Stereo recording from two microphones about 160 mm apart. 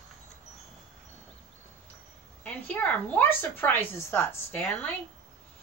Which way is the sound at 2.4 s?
10° left (ahead or behind).